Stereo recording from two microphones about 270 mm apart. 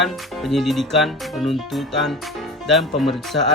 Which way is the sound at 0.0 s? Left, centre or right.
Centre.